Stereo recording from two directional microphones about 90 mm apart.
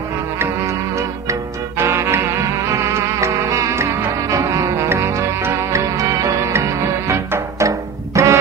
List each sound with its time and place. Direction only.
1.8 s music: 30° right (ahead or behind)